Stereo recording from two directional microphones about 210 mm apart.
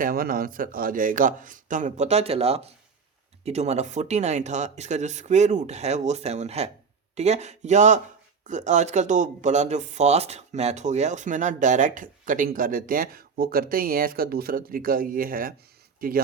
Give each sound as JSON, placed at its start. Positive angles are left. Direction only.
{"t": 0.0, "sound": "speech", "side_deg": -45}